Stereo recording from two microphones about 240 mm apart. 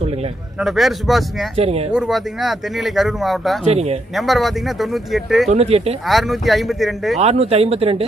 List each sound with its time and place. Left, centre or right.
0.6 s speech: centre
1.6 s speech: right
1.9 s speech: centre
3.6 s speech: right
4.1 s speech: centre
5.5 s speech: right
6.0 s speech: centre
7.2 s speech: right